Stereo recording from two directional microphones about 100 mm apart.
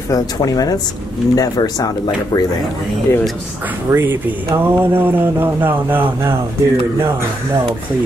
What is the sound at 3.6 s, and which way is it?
Speech, 20° right (ahead or behind).